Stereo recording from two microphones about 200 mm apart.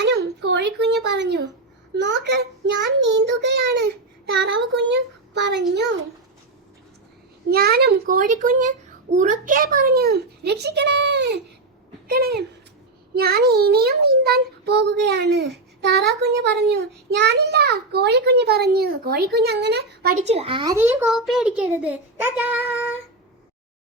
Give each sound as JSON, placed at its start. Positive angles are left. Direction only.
{"t": 0.0, "sound": "a sound", "side_deg": -60}
{"t": 2.0, "sound": "child singing", "side_deg": -60}
{"t": 4.4, "sound": "speech", "side_deg": -60}
{"t": 5.7, "sound": "child singing", "side_deg": -60}
{"t": 7.5, "sound": "a child's voice", "side_deg": -50}
{"t": 13.1, "sound": "child singing", "side_deg": -50}
{"t": 20.2, "sound": "a child's voice", "side_deg": -30}
{"t": 20.7, "sound": "a child's voice", "side_deg": -10}